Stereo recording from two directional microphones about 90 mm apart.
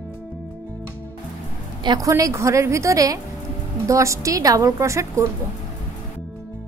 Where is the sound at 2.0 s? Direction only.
35° right (ahead or behind).